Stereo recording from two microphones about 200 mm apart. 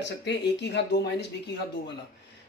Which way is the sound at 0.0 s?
60° left (ahead or behind).